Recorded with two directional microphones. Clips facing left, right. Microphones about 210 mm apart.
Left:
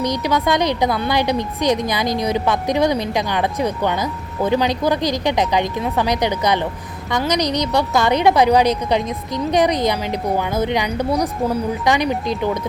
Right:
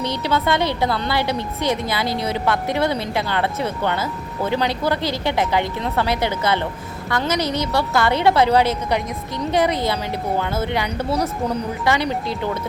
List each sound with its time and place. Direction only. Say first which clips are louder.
0.0 s a woman's voice: left 2 dB; 15° left (ahead or behind)